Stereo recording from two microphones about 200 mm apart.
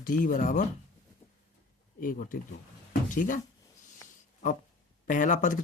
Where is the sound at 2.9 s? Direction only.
40° left (ahead or behind).